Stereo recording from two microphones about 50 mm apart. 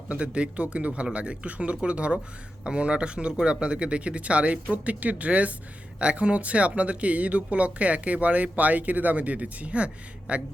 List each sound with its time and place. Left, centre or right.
0.1 s speech: right